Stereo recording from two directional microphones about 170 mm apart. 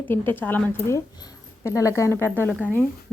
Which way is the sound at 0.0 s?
10° left (ahead or behind).